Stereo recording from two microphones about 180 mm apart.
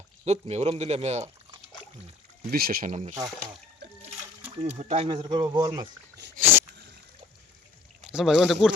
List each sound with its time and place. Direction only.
0.3 s speech: 35° right (ahead or behind)
2.5 s speech: 55° right (ahead or behind)
4.8 s speech: 40° right (ahead or behind)
5.0 s speech: 25° right (ahead or behind)
6.4 s a sound: 10° right (ahead or behind)
8.1 s speech: 5° right (ahead or behind)